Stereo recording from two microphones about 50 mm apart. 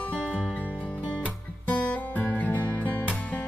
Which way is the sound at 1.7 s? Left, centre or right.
Left.